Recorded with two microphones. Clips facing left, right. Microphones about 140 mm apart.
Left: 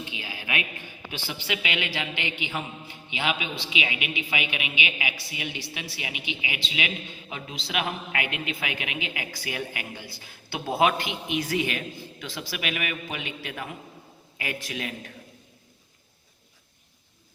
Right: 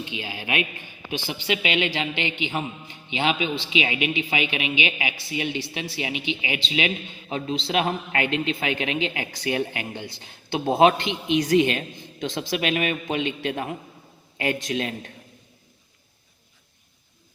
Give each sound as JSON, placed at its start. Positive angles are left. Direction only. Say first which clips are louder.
{"t": 0.0, "sound": "a woman's voice", "louder": "right 5 dB", "side_deg": -25}